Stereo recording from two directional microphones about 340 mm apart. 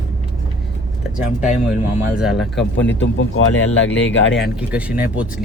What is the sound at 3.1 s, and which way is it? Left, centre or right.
Speech, left.